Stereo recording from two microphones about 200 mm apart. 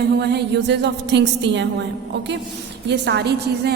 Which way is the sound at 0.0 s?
55° right (ahead or behind).